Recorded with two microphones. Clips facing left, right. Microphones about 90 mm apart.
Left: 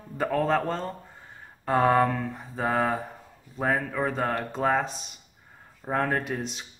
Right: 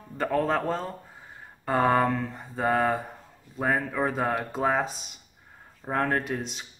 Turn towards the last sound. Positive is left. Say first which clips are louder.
# even
turn(degrees=0)  # may be behind; listen again after turning